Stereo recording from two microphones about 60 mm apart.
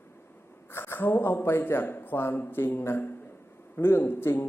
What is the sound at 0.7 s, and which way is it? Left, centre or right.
A man's voice, left.